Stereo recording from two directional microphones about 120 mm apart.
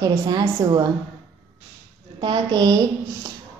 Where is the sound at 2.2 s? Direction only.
40° right (ahead or behind).